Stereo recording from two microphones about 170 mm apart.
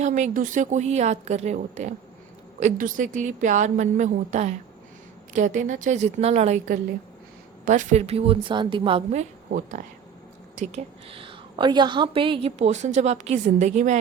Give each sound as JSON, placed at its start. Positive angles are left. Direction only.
{"t": 0.0, "sound": "a woman's voice", "side_deg": -45}
{"t": 9.5, "sound": "speech", "side_deg": -55}
{"t": 10.5, "sound": "a woman's voice", "side_deg": -45}